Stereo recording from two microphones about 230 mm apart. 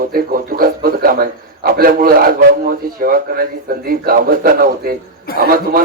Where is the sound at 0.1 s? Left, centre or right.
Right.